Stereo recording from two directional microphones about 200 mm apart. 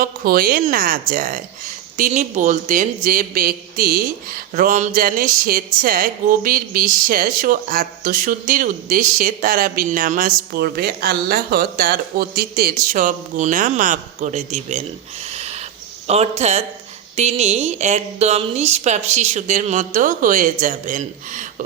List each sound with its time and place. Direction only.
0.0 s speech: 45° right (ahead or behind)